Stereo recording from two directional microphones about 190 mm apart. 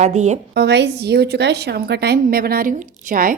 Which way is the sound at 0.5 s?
60° right (ahead or behind).